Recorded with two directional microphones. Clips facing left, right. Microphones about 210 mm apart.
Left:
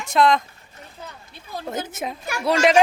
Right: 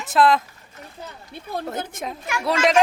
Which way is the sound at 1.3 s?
55° right (ahead or behind).